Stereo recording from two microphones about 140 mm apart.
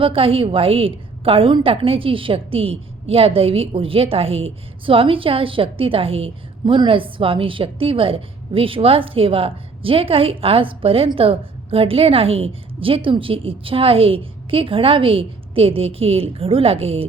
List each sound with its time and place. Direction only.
0.0 s a woman's voice: 40° right (ahead or behind)